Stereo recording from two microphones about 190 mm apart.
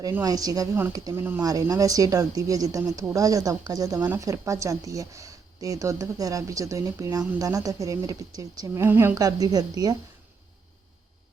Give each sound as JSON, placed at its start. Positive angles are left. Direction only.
{"t": 0.0, "sound": "speech", "side_deg": -15}